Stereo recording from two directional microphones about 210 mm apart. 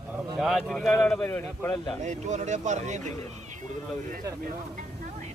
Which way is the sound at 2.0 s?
35° right (ahead or behind).